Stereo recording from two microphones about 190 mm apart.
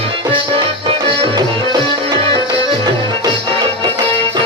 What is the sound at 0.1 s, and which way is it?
Music, 25° right (ahead or behind).